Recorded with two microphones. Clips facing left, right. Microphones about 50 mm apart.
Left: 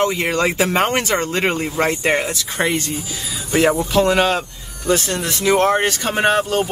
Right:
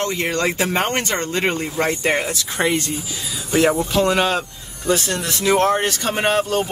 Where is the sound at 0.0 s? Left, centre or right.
Centre.